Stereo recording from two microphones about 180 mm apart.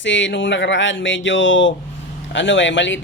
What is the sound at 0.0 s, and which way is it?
Speech, 90° left.